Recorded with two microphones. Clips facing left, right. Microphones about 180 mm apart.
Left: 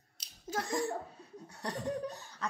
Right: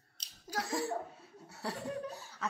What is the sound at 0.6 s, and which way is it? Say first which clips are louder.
Speech: left 1 dB; 5° right (ahead or behind).